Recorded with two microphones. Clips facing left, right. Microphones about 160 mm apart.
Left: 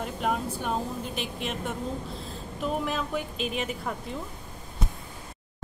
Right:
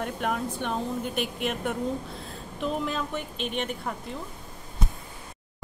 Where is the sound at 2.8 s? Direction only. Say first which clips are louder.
Left 1 dB; 5° left (ahead or behind).